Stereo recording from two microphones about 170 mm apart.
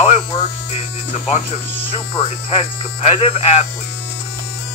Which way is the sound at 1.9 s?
35° left (ahead or behind).